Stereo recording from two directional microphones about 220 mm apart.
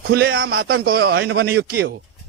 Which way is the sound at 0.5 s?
45° right (ahead or behind).